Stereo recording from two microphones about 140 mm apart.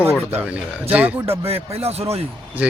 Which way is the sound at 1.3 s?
45° right (ahead or behind).